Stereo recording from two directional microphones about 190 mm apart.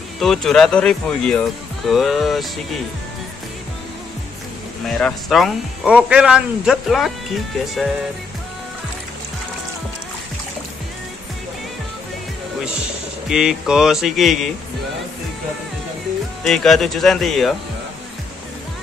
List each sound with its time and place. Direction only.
0.2 s speech: centre (ahead or behind)
4.8 s speech: 5° left (ahead or behind)
13.3 s speech: 5° right (ahead or behind)
16.4 s speech: centre (ahead or behind)